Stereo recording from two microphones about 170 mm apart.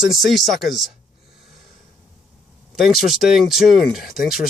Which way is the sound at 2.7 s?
Centre (ahead or behind).